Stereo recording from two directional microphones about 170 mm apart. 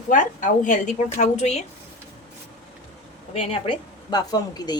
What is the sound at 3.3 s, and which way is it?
A woman's voice, 35° left (ahead or behind).